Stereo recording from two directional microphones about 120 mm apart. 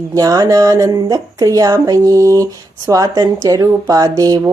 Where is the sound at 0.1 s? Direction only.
30° right (ahead or behind).